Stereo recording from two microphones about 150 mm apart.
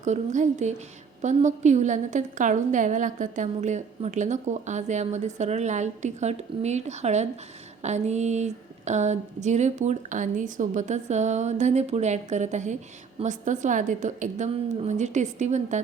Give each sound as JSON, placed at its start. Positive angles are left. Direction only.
{"t": 0.0, "sound": "a woman's voice", "side_deg": -55}